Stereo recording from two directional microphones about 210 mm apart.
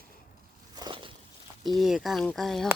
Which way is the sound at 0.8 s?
20° right (ahead or behind).